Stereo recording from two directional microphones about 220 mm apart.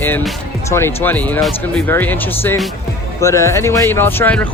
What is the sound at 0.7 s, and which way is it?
Speech, 10° left (ahead or behind).